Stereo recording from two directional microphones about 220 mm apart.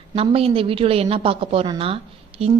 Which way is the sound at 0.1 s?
25° right (ahead or behind).